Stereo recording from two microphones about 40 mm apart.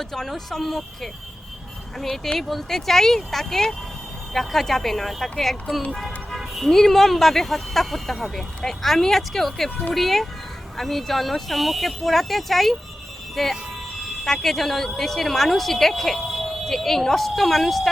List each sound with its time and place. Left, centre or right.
0.0 s speech: centre
2.4 s speech: centre
6.0 s vehicle: centre
6.7 s speech: centre